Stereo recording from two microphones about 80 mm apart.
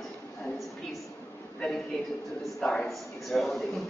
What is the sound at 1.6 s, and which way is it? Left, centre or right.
A man's voice, centre.